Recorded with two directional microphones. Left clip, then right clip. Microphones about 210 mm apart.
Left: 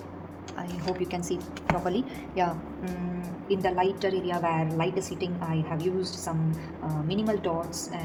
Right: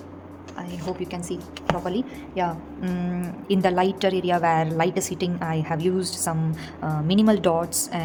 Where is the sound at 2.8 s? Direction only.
25° right (ahead or behind).